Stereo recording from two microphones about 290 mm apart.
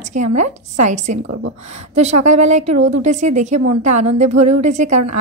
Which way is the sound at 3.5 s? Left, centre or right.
Right.